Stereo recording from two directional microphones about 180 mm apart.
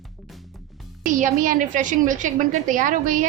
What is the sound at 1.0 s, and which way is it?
A woman's voice, 45° right (ahead or behind).